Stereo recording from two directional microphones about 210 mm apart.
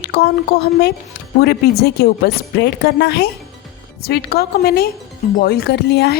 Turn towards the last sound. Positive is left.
turn(degrees=50)  # may be behind; listen again after turning